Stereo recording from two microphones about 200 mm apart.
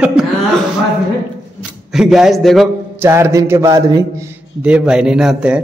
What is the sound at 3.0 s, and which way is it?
A man's voice, 15° right (ahead or behind).